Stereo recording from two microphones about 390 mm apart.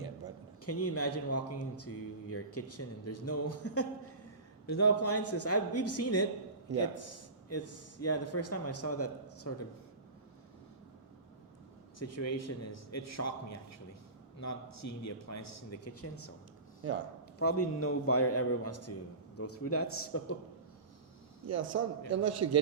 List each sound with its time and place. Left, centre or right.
0.6 s speech: left
11.9 s speech: left
17.4 s speech: left
21.4 s a man's voice: right